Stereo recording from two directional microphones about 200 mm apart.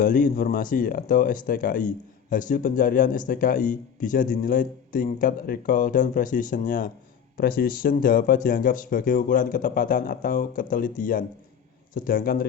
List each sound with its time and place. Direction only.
0.0 s speech: 40° left (ahead or behind)